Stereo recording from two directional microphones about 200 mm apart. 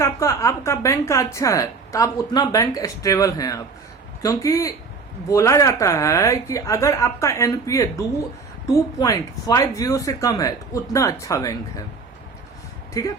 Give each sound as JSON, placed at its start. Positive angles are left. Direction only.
{"t": 0.0, "sound": "a woman's voice", "side_deg": 15}
{"t": 12.9, "sound": "speech", "side_deg": 15}